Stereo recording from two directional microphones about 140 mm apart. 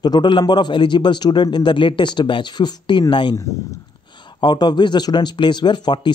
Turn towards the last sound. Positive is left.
turn(degrees=30)  # may be behind; listen again after turning